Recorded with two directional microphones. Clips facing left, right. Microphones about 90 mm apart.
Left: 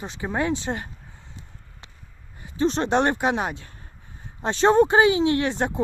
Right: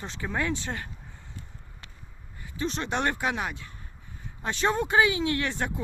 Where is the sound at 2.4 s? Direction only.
35° left (ahead or behind).